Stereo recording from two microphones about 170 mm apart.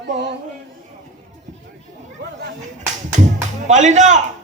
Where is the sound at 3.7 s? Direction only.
45° right (ahead or behind).